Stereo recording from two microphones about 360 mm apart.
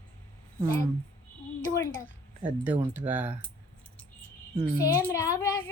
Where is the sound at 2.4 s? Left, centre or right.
Centre.